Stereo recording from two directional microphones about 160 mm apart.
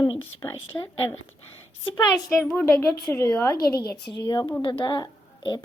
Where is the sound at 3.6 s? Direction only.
80° left.